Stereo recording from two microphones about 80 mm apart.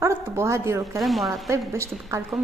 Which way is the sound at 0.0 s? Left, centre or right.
Right.